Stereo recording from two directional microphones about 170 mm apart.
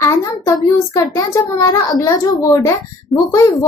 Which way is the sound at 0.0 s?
20° left (ahead or behind).